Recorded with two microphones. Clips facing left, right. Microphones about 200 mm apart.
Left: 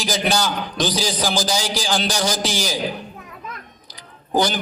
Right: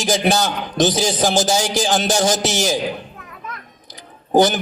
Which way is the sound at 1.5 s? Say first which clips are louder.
Right 4 dB; 50° right (ahead or behind).